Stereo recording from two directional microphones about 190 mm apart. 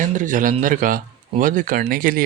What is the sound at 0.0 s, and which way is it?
Speech, 45° right (ahead or behind).